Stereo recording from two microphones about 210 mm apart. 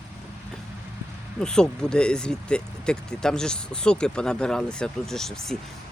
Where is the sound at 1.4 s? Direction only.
5° left (ahead or behind).